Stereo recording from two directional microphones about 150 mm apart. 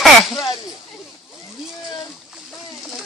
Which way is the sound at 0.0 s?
Centre (ahead or behind).